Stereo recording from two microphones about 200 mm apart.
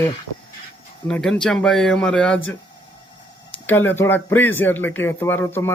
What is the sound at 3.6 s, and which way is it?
Speech, 10° left (ahead or behind).